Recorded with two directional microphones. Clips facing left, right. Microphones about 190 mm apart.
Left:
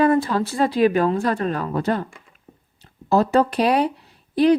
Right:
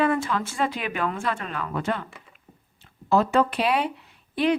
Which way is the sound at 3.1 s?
40° left (ahead or behind).